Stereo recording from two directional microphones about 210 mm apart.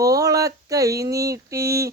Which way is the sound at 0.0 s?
15° right (ahead or behind).